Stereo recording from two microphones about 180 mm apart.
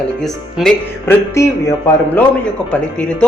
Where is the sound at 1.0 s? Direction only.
15° left (ahead or behind).